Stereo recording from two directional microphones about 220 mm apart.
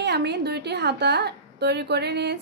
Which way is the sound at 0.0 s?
50° right (ahead or behind).